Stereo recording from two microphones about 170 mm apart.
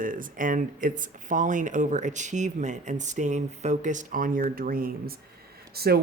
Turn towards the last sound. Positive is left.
turn(degrees=-65)  # may be behind; listen again after turning